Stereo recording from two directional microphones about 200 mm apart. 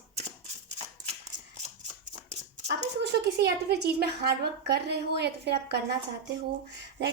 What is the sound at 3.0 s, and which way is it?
A woman's voice, 55° right (ahead or behind).